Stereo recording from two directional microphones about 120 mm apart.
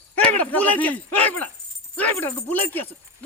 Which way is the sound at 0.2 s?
10° left (ahead or behind).